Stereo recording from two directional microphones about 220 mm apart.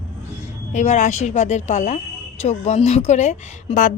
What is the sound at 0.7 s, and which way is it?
A woman's voice, 35° left (ahead or behind).